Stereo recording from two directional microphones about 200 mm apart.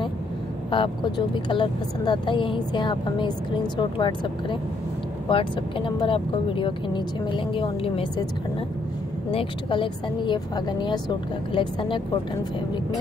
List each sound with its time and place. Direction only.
0.7 s speech: 25° left (ahead or behind)
9.3 s speech: 25° left (ahead or behind)